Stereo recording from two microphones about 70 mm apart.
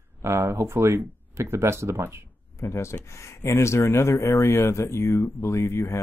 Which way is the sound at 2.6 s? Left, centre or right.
Left.